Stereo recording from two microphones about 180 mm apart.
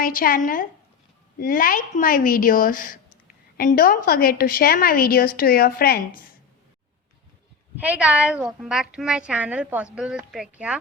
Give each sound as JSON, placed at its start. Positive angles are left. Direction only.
{"t": 0.0, "sound": "a woman's voice", "side_deg": 50}
{"t": 7.8, "sound": "a woman's voice", "side_deg": -5}